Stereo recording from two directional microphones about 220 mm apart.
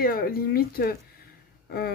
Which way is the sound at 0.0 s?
40° left (ahead or behind).